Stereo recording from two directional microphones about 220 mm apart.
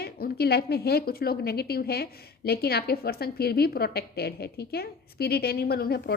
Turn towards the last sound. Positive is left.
turn(degrees=45)  # may be behind; listen again after turning